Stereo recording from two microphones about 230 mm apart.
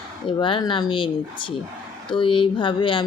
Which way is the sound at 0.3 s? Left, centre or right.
Left.